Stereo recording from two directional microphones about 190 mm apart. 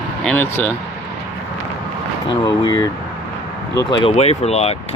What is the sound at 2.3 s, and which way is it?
Speech, 20° left (ahead or behind).